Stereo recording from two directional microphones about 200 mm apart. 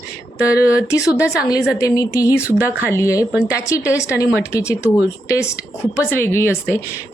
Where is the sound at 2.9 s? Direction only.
15° left (ahead or behind).